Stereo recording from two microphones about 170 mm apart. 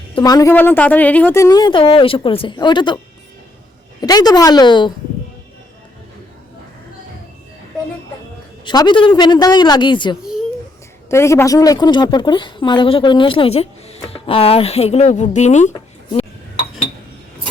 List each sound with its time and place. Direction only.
0.2 s speech: 20° left (ahead or behind)
0.5 s speech: 10° left (ahead or behind); by 3.0 s 25° left (ahead or behind)
4.0 s speech: 25° left (ahead or behind)
8.6 s speech: 25° left (ahead or behind)
11.1 s speech: 15° left (ahead or behind); by 15.7 s 45° left (ahead or behind)